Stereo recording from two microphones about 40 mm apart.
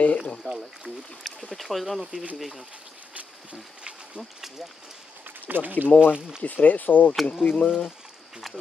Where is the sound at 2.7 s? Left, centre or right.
Right.